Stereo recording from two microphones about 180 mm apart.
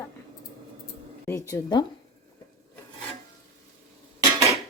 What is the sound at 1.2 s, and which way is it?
Speech, 15° left (ahead or behind).